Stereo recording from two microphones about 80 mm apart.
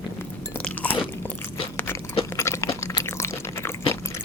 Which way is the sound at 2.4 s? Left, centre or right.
Left.